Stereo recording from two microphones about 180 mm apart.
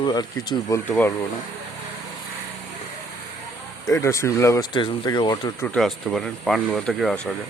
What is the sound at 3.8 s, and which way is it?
Speech, 15° left (ahead or behind).